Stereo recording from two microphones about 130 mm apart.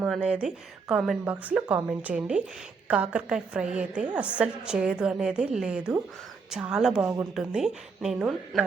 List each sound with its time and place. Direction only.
0.0 s a woman's voice: 5° right (ahead or behind)